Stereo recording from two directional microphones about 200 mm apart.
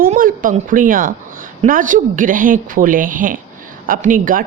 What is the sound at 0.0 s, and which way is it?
Speech, 45° right (ahead or behind).